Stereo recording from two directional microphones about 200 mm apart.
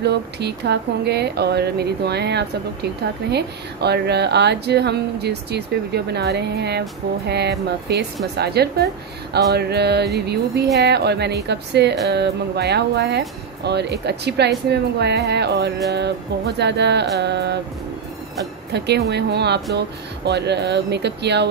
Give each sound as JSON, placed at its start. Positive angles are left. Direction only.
{"t": 0.0, "sound": "a woman's voice", "side_deg": -55}
{"t": 18.7, "sound": "speech", "side_deg": -55}